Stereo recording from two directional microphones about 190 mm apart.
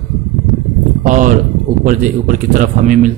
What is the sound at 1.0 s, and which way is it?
Speech, 45° right (ahead or behind).